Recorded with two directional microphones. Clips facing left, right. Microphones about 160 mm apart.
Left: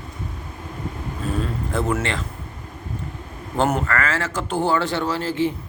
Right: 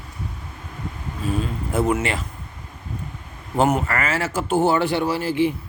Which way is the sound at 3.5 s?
5° right (ahead or behind).